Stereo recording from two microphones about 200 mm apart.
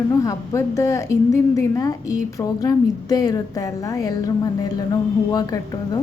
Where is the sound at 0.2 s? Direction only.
15° left (ahead or behind).